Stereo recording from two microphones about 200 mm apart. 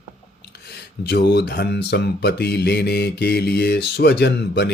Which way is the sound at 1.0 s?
55° left (ahead or behind).